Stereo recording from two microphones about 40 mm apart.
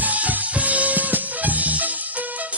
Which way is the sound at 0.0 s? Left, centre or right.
Right.